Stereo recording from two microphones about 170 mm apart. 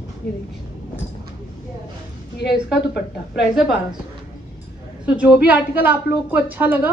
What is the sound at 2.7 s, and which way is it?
Speech, 90° left.